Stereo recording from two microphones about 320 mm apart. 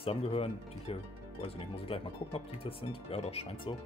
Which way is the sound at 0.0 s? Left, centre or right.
Centre.